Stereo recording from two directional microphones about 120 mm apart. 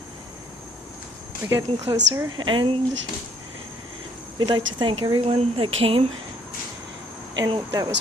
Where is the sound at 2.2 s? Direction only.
40° right (ahead or behind).